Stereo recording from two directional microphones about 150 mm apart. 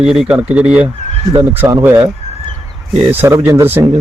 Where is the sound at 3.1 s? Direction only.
15° right (ahead or behind).